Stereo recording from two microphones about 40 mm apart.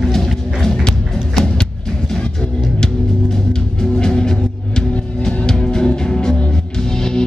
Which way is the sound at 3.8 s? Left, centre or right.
Centre.